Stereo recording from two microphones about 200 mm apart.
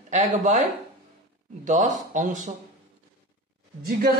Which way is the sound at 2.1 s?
40° right (ahead or behind).